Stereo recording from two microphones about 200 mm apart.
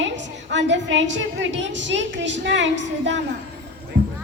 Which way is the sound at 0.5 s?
65° right (ahead or behind).